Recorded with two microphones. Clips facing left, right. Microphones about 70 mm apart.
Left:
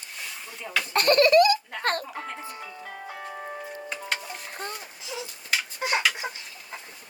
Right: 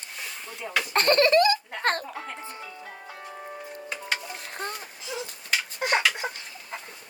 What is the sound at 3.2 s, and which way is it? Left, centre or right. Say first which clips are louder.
Music: left 2 dB; left.